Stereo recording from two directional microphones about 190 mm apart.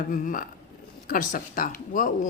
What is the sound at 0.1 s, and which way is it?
A man's voice, 45° left (ahead or behind).